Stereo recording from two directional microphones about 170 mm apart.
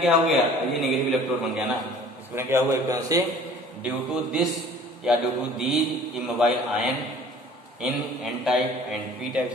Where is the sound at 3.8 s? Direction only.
Centre (ahead or behind).